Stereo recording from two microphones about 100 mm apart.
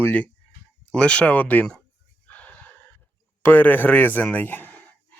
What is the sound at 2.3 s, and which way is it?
Gasp, 15° left (ahead or behind).